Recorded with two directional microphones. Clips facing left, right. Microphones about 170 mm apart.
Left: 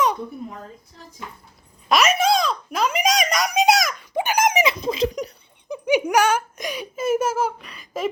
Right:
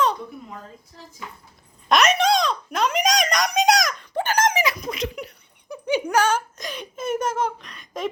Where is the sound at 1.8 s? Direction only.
Centre (ahead or behind); by 5.1 s 30° left (ahead or behind).